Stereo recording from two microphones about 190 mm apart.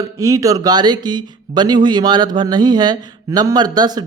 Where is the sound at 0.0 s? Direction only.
15° right (ahead or behind).